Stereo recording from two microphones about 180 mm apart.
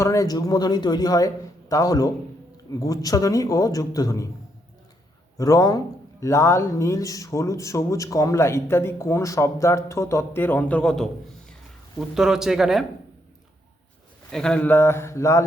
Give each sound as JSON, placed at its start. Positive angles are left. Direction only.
{"t": 0.0, "sound": "a man's voice", "side_deg": 15}
{"t": 5.4, "sound": "speech", "side_deg": 20}
{"t": 14.3, "sound": "speech", "side_deg": 5}